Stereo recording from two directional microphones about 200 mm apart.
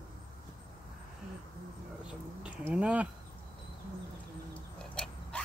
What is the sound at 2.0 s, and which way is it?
Speech, 5° right (ahead or behind).